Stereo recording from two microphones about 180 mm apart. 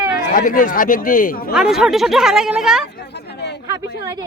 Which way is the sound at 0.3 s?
50° left (ahead or behind).